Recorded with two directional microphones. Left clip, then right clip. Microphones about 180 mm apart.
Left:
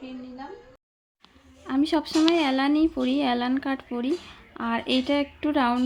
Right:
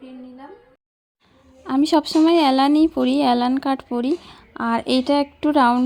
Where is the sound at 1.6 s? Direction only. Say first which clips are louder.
Right 7 dB; 30° right (ahead or behind).